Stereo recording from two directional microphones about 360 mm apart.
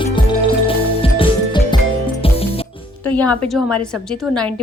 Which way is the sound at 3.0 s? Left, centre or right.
Centre.